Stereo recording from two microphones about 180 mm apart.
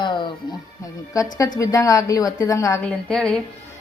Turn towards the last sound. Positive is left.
turn(degrees=0)  # may be behind; listen again after turning